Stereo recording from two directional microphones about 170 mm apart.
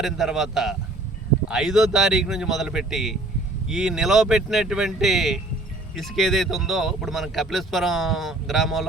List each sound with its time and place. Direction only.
0.0 s speech: centre (ahead or behind)